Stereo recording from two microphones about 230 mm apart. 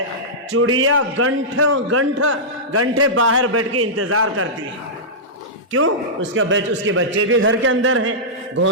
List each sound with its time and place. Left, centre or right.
0.5 s a man's voice: right
6.3 s a man's voice: right